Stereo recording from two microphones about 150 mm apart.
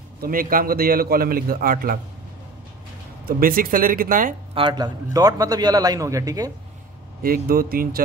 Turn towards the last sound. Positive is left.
turn(degrees=-75)  # may be behind; listen again after turning